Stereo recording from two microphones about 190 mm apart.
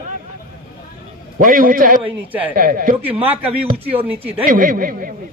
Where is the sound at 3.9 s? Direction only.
10° right (ahead or behind).